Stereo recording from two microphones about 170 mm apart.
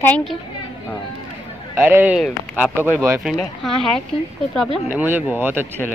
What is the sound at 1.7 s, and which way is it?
A man's voice, 15° right (ahead or behind).